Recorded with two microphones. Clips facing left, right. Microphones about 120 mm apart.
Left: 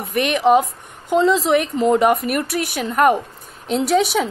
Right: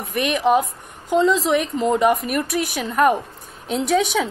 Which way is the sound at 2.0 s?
5° left (ahead or behind).